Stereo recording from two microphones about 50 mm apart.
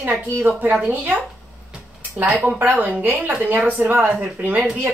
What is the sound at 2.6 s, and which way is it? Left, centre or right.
A woman's voice, right.